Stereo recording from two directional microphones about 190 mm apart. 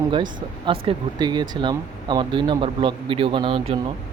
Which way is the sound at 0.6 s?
25° right (ahead or behind).